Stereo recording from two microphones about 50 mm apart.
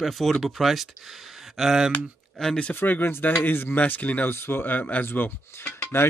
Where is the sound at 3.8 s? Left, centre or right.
Left.